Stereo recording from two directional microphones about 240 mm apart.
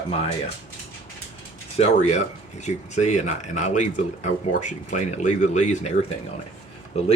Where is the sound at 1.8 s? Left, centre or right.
Left.